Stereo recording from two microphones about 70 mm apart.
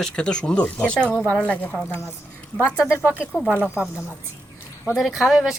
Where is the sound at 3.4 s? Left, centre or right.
Left.